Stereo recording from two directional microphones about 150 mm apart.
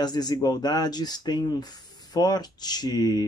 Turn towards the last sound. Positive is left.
turn(degrees=25)  # may be behind; listen again after turning